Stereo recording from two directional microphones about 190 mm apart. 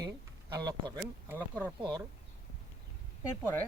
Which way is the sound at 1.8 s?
25° right (ahead or behind).